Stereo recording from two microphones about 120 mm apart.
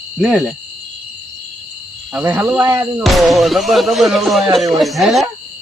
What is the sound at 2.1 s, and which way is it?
Speech, 15° right (ahead or behind).